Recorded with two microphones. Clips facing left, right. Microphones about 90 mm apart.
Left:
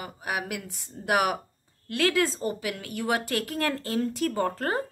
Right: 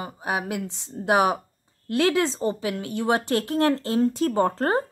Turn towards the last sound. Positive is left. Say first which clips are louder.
# right 5 dB
turn(degrees=-30)  # may be behind; listen again after turning